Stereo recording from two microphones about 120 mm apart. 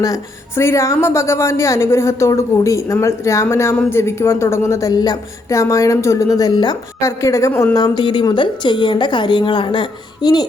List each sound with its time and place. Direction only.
0.0 s a woman's voice: 25° left (ahead or behind)
7.0 s a woman's voice: 25° left (ahead or behind)